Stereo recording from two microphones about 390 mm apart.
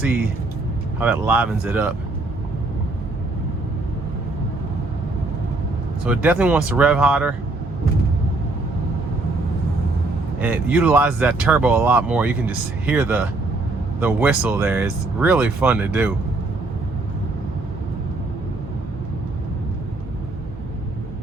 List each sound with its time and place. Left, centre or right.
0.9 s speech: centre
6.1 s speech: centre
10.4 s speech: centre